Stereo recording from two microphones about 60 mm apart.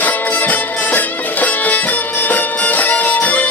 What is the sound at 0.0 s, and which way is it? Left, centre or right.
Music, left.